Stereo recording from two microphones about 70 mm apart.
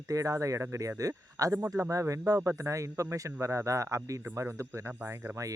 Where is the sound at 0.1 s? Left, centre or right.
Right.